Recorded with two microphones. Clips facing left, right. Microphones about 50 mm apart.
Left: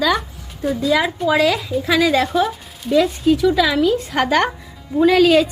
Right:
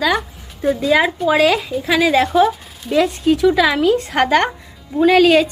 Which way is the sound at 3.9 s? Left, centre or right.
Centre.